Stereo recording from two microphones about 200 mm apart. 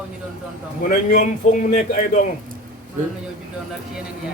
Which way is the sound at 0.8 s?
40° left (ahead or behind).